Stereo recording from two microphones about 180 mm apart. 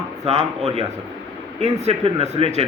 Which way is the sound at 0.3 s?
35° right (ahead or behind).